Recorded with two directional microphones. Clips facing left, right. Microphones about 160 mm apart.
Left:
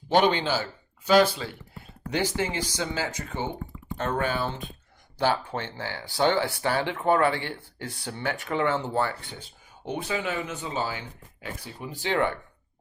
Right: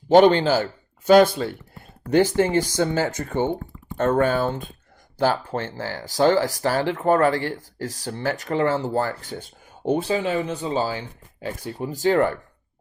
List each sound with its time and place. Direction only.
0.1 s speech: 45° right (ahead or behind)
10.0 s speech: 30° right (ahead or behind)